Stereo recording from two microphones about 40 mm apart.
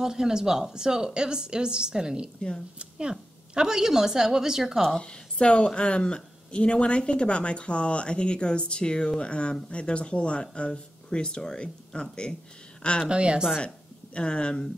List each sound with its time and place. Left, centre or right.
0.0 s a woman's voice: centre
5.0 s speech: left
13.1 s a woman's voice: right
14.1 s speech: left